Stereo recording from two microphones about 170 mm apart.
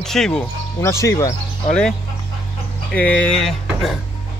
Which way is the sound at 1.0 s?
20° left (ahead or behind).